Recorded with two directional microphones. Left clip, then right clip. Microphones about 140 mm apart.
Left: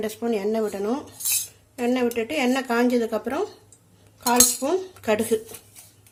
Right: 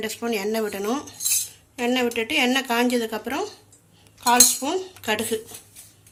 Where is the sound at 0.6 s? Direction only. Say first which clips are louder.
Even; 20° left (ahead or behind); by 3.5 s 40° left (ahead or behind).